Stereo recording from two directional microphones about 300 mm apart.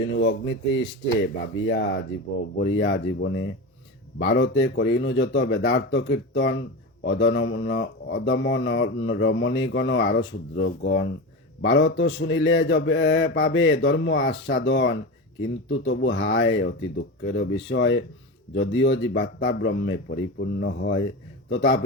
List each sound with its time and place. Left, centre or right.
0.2 s speech: left